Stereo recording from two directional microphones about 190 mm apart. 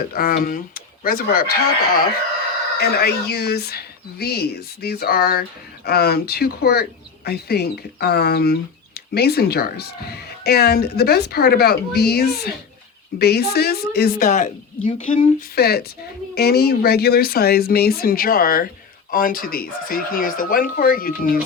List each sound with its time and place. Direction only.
0.1 s speech: 50° left (ahead or behind)
14.3 s speech: 40° left (ahead or behind)
15.4 s speech: 55° left (ahead or behind)